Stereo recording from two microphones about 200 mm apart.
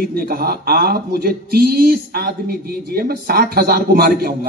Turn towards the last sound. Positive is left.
turn(degrees=-50)  # may be behind; listen again after turning